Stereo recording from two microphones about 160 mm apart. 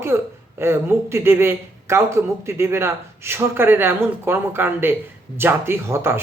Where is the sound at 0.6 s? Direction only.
15° right (ahead or behind).